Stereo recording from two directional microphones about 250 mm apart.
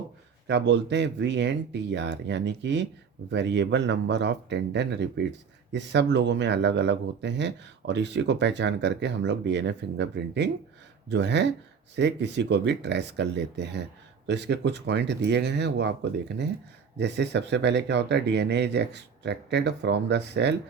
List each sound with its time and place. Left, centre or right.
0.4 s speech: right
17.0 s speech: right